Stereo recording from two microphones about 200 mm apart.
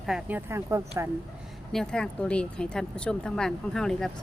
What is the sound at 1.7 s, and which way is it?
Speech, 5° left (ahead or behind).